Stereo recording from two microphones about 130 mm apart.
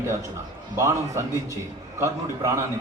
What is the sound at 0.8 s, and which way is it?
Speech, 20° right (ahead or behind).